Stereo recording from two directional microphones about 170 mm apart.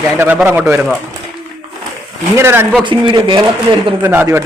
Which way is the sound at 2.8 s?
30° right (ahead or behind).